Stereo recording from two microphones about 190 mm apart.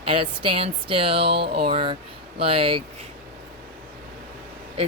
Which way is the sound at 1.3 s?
55° right (ahead or behind).